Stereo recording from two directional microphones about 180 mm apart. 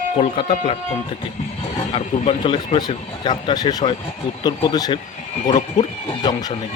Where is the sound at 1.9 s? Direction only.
30° left (ahead or behind).